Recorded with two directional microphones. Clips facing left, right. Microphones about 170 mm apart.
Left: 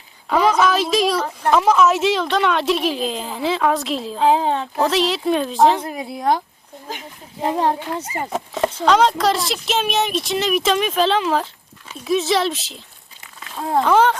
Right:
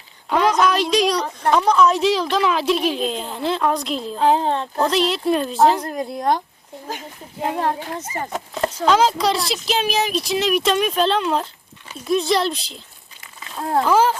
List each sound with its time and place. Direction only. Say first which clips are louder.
0.3 s a woman's voice: left 1 dB; centre (ahead or behind)
8.1 s speech: left 1 dB; 10° left (ahead or behind)
8.8 s a woman's voice: left 1 dB; centre (ahead or behind)